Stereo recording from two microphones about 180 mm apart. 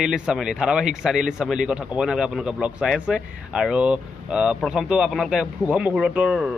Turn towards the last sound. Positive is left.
turn(degrees=-5)  # may be behind; listen again after turning